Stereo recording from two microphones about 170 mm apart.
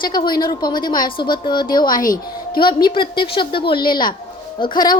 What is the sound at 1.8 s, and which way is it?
Speech, 55° left (ahead or behind).